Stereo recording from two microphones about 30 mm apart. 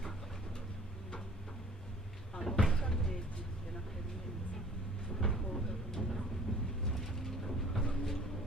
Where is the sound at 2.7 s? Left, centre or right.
Centre.